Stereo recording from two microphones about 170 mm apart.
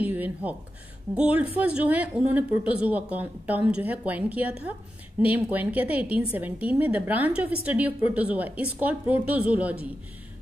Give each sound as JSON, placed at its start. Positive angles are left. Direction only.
{"t": 0.0, "sound": "a woman's voice", "side_deg": -10}